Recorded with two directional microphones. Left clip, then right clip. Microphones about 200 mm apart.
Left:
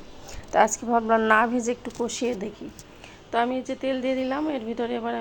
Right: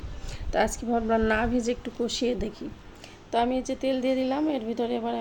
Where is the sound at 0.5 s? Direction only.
25° right (ahead or behind).